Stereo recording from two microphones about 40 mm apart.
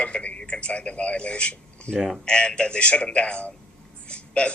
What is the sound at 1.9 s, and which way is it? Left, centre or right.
Speech, centre.